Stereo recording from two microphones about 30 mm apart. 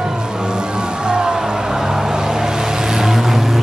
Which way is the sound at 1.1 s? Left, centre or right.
Right.